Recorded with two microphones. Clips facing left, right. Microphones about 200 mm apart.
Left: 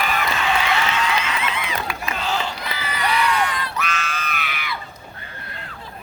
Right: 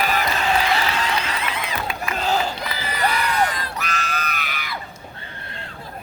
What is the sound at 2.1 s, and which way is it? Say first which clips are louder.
Run: right 4 dB; 40° right (ahead or behind).